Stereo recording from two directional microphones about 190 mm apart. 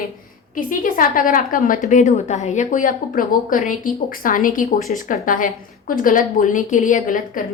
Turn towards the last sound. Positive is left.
turn(degrees=45)  # may be behind; listen again after turning